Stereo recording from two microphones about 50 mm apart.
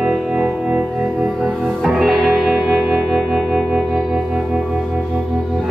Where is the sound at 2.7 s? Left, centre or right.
Right.